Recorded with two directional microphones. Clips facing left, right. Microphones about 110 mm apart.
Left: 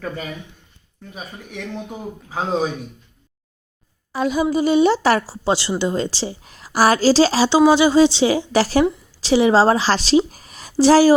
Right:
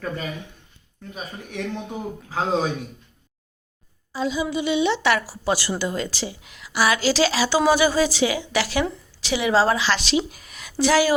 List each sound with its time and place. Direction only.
1.1 s a man's voice: centre (ahead or behind)
4.1 s a woman's voice: 60° left (ahead or behind)
4.4 s a woman's voice: 40° left (ahead or behind)